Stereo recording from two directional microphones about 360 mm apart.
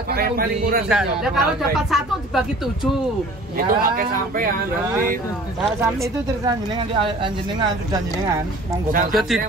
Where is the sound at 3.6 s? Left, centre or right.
Right.